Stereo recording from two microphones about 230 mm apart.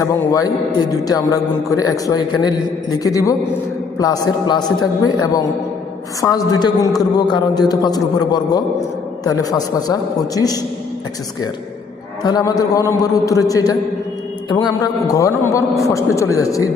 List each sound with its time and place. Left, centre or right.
0.0 s a man's voice: centre
6.2 s a man's voice: centre
12.2 s a man's voice: centre